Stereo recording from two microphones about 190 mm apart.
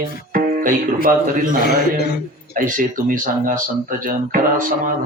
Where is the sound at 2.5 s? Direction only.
45° right (ahead or behind).